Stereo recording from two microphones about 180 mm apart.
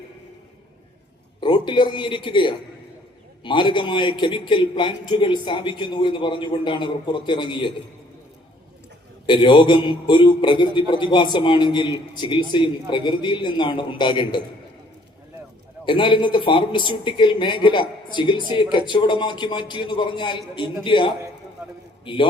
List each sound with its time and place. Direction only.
1.4 s a man's voice: 25° left (ahead or behind)
9.2 s a man's voice: 25° left (ahead or behind)
15.9 s a man's voice: 25° left (ahead or behind)